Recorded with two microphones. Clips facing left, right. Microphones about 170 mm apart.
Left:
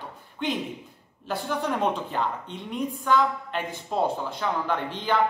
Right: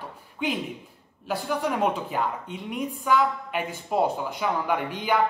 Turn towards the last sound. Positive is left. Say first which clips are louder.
# right 1 dB
turn(degrees=-10)  # may be behind; listen again after turning